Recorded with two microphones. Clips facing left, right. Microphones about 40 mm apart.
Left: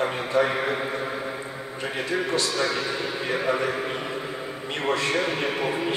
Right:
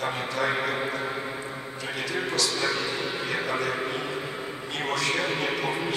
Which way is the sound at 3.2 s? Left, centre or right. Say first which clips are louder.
Left 5 dB; left.